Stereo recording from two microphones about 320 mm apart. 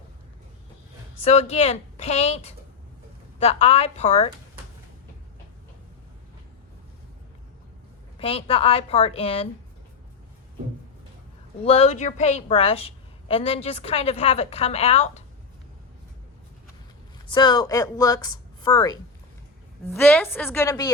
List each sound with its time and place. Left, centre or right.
1.2 s a woman's voice: centre
8.2 s speech: centre
11.6 s a woman's voice: centre
17.3 s speech: centre